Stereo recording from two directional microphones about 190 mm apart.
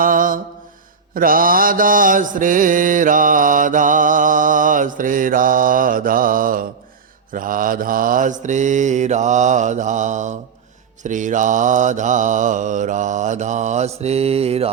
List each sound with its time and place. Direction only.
0.0 s mantra: 45° right (ahead or behind)